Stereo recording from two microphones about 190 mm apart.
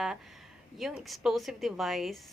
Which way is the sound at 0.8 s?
Centre (ahead or behind).